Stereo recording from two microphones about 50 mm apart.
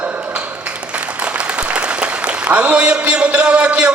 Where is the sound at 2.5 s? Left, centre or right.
Right.